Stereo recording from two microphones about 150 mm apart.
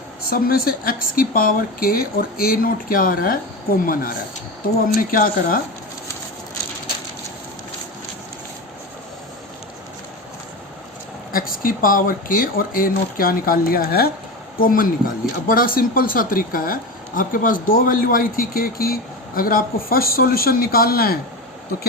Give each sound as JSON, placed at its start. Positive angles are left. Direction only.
{"t": 0.3, "sound": "speech", "side_deg": 80}
{"t": 11.3, "sound": "speech", "side_deg": 75}
{"t": 14.6, "sound": "a man's voice", "side_deg": 70}